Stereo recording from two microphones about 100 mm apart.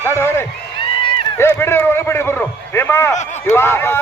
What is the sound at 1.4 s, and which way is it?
Run, 25° left (ahead or behind).